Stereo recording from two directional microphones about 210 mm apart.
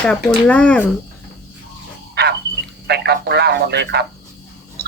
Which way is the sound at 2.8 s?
50° right (ahead or behind).